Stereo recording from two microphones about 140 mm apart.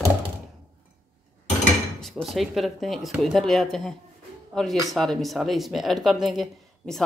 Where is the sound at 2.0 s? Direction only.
Centre (ahead or behind).